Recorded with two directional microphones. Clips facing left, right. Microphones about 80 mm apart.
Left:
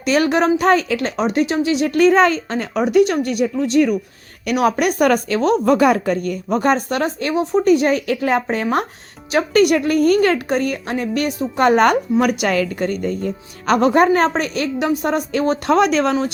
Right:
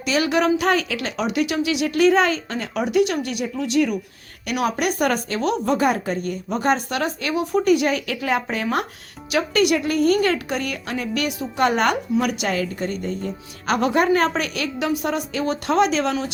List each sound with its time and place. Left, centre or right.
0.0 s speech: left
5.6 s speech: left
6.5 s speech: left